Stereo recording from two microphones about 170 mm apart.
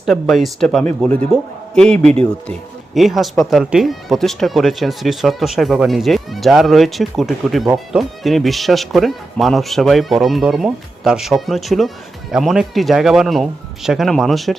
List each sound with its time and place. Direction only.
0.0 s speech: centre (ahead or behind)